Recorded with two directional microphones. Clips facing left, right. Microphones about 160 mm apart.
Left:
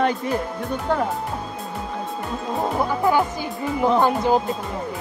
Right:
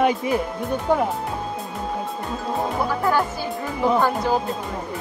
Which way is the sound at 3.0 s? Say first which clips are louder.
Left 3 dB; 15° left (ahead or behind).